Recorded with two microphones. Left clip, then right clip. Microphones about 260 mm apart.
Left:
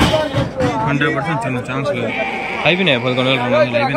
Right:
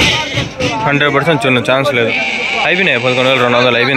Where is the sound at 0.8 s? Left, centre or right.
Right.